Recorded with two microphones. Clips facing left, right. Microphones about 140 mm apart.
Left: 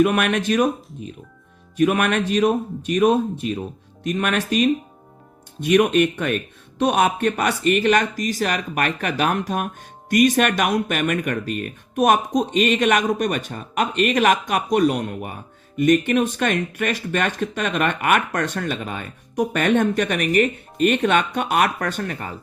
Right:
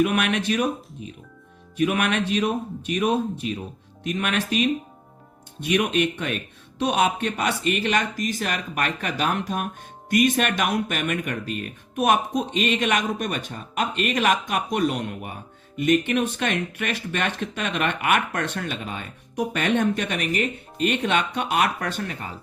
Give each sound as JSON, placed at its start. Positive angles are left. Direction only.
{"t": 0.0, "sound": "speech", "side_deg": 45}